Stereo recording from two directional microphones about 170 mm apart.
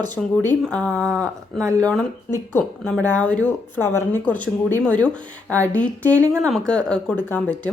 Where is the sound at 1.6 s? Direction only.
15° right (ahead or behind).